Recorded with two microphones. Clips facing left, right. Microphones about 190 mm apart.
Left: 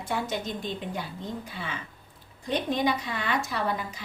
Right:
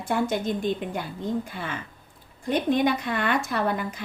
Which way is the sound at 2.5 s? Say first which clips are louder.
Right 4 dB; 55° right (ahead or behind).